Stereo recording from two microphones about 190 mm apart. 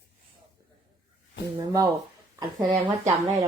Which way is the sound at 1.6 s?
20° right (ahead or behind).